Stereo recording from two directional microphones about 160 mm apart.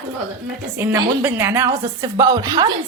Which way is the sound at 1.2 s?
15° right (ahead or behind).